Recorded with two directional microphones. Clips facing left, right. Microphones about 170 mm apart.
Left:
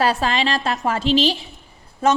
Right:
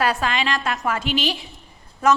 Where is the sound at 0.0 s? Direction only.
30° left (ahead or behind).